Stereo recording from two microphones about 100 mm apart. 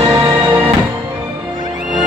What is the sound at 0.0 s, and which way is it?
Music, 25° right (ahead or behind).